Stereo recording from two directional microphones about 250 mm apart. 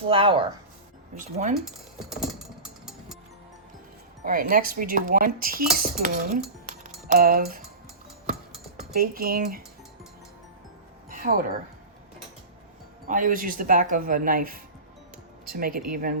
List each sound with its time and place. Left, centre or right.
0.1 s speech: right
4.2 s speech: right
9.0 s speech: right
11.1 s a woman's voice: right
13.1 s speech: right